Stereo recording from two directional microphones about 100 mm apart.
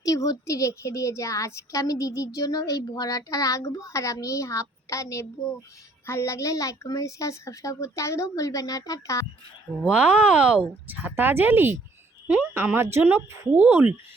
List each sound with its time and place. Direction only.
0.0 s a woman's voice: 35° left (ahead or behind)
9.8 s speech: 10° right (ahead or behind)